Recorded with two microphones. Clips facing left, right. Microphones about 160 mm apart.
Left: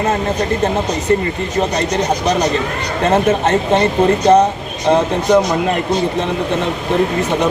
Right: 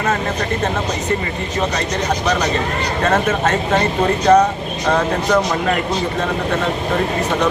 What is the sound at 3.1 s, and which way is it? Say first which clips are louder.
Speech: left 4 dB; 25° left (ahead or behind).